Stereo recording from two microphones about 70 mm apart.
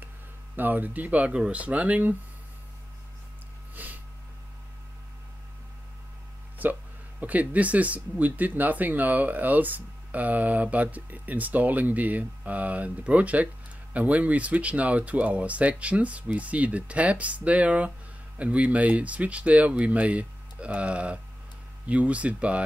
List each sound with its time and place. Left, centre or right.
0.6 s speech: right
3.7 s snort: right
6.6 s speech: right